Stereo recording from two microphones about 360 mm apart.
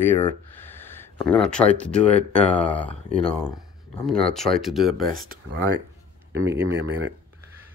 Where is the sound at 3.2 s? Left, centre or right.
Centre.